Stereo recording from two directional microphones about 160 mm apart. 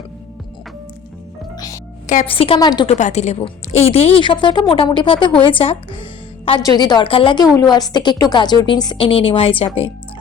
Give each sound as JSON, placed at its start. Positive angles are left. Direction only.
{"t": 1.5, "sound": "music", "side_deg": 20}
{"t": 2.3, "sound": "a woman's voice", "side_deg": 35}
{"t": 2.8, "sound": "a woman's voice", "side_deg": 45}